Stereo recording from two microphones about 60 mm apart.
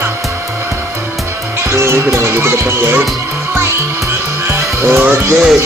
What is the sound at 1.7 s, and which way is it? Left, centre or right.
Music, right.